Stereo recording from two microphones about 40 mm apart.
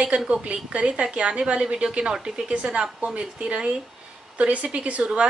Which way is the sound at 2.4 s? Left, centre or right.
Right.